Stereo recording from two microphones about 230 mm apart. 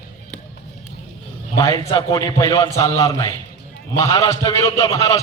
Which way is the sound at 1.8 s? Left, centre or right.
Centre.